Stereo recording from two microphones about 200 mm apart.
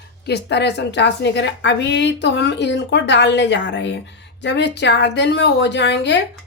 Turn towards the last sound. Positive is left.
turn(degrees=60)  # may be behind; listen again after turning